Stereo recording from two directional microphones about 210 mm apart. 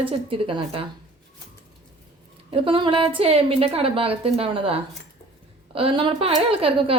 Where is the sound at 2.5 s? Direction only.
25° right (ahead or behind).